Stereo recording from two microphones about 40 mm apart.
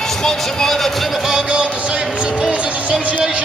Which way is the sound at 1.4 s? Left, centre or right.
Right.